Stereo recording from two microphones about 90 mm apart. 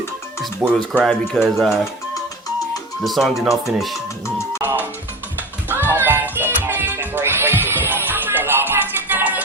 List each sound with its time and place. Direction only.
0.6 s speech: 10° right (ahead or behind)
1.4 s speech: centre (ahead or behind)
3.0 s speech: centre (ahead or behind)
5.6 s music: 25° right (ahead or behind)